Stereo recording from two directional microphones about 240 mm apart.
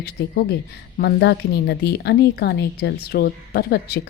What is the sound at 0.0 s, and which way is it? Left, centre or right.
Speech, left.